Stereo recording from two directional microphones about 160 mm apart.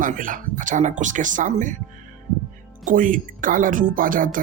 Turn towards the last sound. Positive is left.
turn(degrees=-60)  # may be behind; listen again after turning